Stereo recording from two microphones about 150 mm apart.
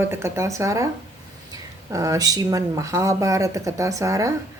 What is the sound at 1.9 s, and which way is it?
A woman's voice, 20° right (ahead or behind).